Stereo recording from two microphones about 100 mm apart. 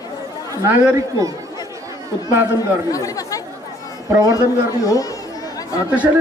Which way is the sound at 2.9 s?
35° left (ahead or behind).